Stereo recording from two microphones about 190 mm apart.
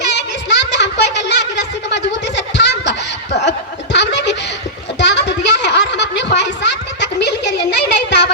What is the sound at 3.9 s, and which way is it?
Snicker, 65° left (ahead or behind).